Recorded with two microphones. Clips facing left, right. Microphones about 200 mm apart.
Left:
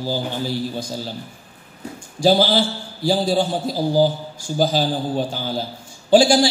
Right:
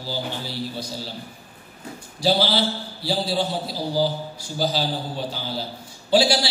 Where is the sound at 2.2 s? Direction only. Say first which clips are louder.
Left 5 dB; 45° left (ahead or behind).